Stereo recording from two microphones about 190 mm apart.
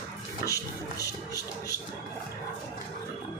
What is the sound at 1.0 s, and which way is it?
Speech, 20° left (ahead or behind).